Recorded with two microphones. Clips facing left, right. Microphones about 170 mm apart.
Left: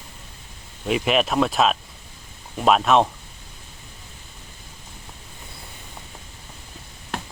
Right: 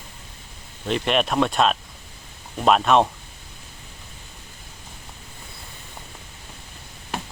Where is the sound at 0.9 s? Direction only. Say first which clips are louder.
Left 1 dB; 5° left (ahead or behind).